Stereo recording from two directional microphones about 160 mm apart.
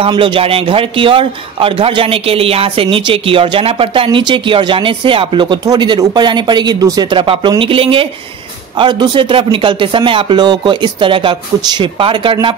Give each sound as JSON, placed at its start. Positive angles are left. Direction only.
{"t": 0.0, "sound": "a man's voice", "side_deg": -30}